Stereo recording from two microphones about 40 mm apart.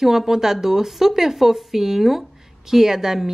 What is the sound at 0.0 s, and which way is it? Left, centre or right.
Speech, centre.